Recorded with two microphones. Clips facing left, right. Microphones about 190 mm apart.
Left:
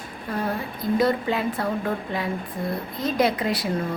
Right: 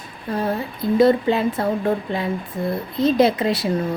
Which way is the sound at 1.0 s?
25° right (ahead or behind).